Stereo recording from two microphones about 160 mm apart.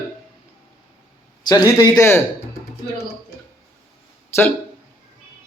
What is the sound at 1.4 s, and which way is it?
Speech, 20° left (ahead or behind).